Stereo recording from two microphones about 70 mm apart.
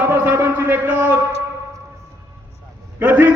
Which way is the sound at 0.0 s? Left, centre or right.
Right.